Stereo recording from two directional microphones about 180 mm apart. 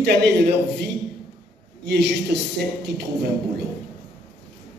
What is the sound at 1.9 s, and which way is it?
A man's voice, 70° right (ahead or behind).